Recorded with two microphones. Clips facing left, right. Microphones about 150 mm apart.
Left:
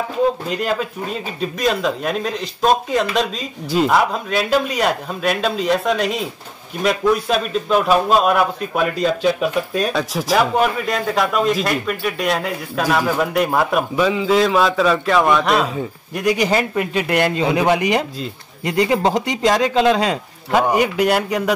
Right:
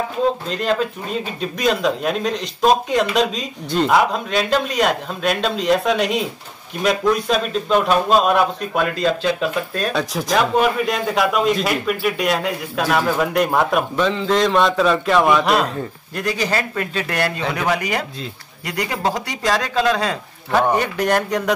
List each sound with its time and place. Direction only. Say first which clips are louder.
0.5 s speech: right 1 dB; 5° left (ahead or behind)
16.2 s speech: left 4 dB; 15° left (ahead or behind)